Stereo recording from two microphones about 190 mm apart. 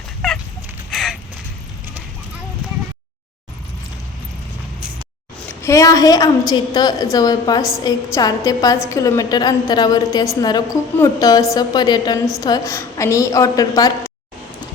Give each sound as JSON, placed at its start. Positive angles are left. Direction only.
{"t": 0.2, "sound": "fowl", "side_deg": 0}
{"t": 0.9, "sound": "a sound", "side_deg": 0}
{"t": 5.6, "sound": "a woman's voice", "side_deg": 15}